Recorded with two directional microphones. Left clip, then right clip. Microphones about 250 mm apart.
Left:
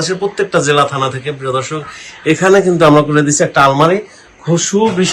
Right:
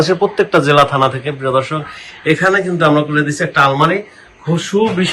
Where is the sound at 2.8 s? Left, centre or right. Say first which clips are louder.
Left 4 dB; left.